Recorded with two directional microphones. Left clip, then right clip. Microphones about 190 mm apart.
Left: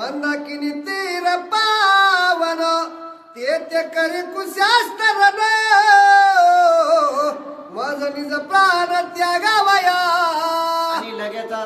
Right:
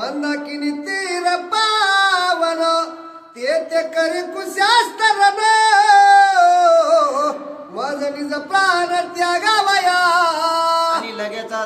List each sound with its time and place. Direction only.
0.0 s music: 20° left (ahead or behind)
3.4 s a sound: 20° left (ahead or behind)
7.8 s music: 20° left (ahead or behind)